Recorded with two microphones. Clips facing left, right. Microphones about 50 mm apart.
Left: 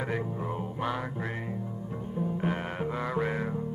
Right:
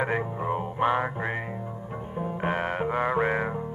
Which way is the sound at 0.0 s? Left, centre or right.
Right.